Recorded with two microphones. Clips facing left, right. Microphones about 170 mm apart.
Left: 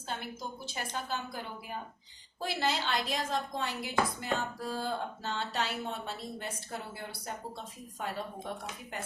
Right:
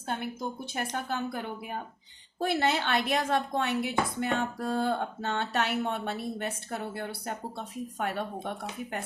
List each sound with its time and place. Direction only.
0.9 s speech: 55° right (ahead or behind)